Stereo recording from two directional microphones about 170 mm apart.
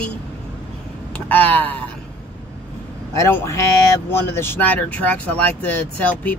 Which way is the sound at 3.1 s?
15° left (ahead or behind).